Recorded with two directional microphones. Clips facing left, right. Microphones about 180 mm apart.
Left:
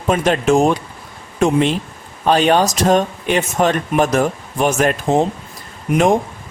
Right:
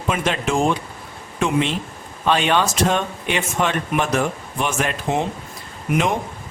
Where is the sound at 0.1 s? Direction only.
40° left (ahead or behind).